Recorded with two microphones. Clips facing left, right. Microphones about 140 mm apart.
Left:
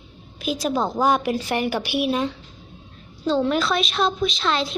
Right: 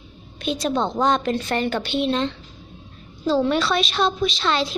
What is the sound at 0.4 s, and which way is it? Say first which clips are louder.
A woman's voice: even; 5° left (ahead or behind).